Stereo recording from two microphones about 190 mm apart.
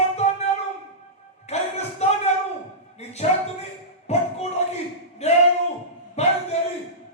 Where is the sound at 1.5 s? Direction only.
35° left (ahead or behind).